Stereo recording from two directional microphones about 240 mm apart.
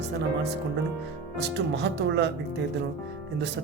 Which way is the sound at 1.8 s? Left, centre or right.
Right.